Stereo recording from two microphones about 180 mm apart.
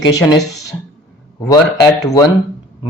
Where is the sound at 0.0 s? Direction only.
20° left (ahead or behind).